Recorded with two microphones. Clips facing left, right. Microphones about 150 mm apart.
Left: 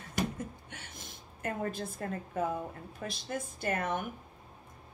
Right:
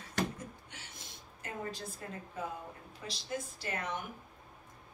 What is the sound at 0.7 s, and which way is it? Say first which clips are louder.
A woman's voice: left 4 dB; 55° left (ahead or behind).